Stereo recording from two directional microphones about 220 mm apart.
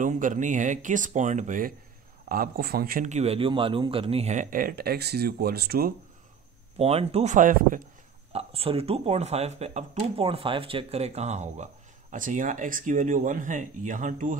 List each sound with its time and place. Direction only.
0.0 s speech: 35° right (ahead or behind)
6.8 s speech: 25° right (ahead or behind)